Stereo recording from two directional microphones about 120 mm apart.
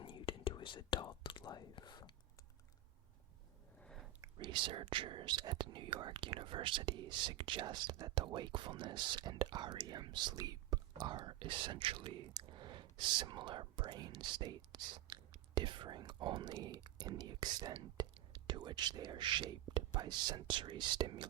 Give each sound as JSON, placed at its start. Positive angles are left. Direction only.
{"t": 0.0, "sound": "whispering", "side_deg": 45}
{"t": 4.4, "sound": "speech", "side_deg": -40}